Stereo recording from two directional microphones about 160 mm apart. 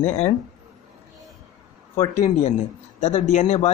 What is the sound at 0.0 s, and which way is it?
Speech, 40° left (ahead or behind).